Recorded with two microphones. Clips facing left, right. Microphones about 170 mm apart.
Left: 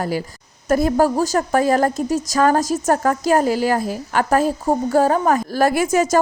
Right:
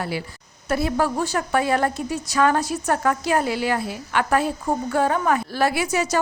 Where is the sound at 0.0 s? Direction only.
40° left (ahead or behind).